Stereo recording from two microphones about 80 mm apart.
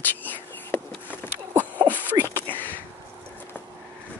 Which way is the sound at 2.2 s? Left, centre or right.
Left.